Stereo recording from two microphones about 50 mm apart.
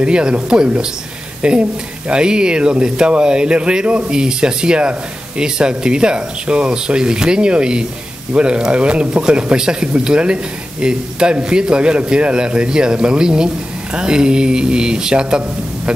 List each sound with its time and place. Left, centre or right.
0.0 s speech: centre